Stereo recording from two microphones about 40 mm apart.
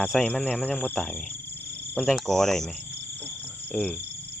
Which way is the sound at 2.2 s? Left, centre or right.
Centre.